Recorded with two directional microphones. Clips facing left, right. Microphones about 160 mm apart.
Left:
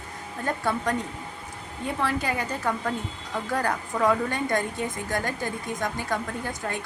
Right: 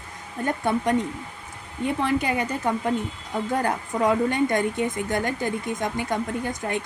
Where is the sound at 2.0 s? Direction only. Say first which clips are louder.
Right 3 dB; 20° right (ahead or behind).